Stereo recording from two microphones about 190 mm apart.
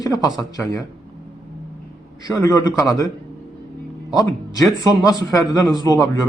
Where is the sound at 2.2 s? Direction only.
15° left (ahead or behind).